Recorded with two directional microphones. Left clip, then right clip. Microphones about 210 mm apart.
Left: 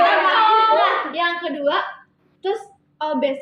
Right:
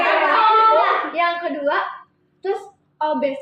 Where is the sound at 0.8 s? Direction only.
20° left (ahead or behind).